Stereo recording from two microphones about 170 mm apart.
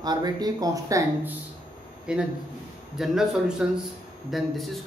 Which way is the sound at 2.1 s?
5° right (ahead or behind).